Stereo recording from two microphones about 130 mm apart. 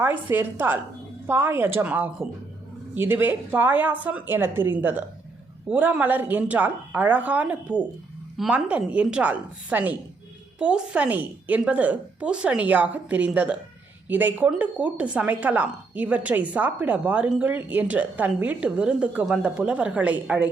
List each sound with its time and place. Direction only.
0.0 s a woman's voice: 15° right (ahead or behind)